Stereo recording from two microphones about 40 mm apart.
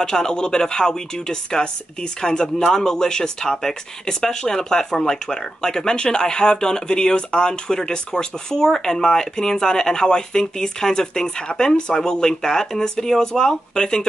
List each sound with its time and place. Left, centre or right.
0.0 s speech: centre